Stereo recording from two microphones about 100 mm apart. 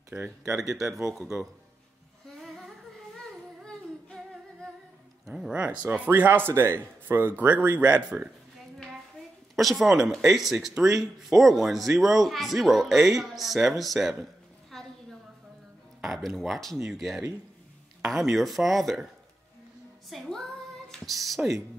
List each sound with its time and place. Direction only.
0.4 s speech: 5° right (ahead or behind)
2.3 s humming: centre (ahead or behind)
5.2 s speech: 10° right (ahead or behind)
9.6 s speech: centre (ahead or behind)
14.7 s a sound: centre (ahead or behind)
16.0 s speech: centre (ahead or behind)
20.1 s speech: 5° left (ahead or behind)